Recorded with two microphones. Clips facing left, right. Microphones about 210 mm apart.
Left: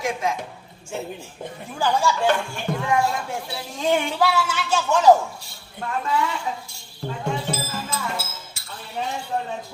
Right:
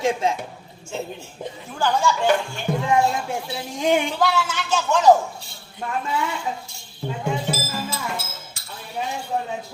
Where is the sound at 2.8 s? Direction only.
20° right (ahead or behind).